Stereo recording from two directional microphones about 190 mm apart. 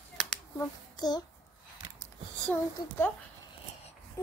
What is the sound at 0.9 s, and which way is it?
Child singing, 20° left (ahead or behind).